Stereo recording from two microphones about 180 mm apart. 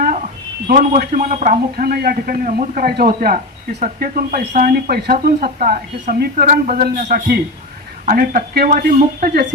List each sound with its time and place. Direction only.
0.7 s speech: 50° right (ahead or behind)
9.2 s speech: 60° right (ahead or behind)